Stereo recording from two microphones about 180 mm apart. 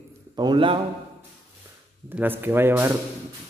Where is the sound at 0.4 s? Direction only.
25° right (ahead or behind).